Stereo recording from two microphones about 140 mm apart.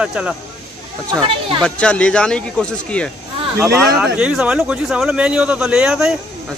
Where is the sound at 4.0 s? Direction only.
5° right (ahead or behind).